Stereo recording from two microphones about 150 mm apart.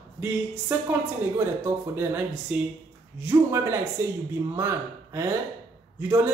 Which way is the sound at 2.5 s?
10° right (ahead or behind).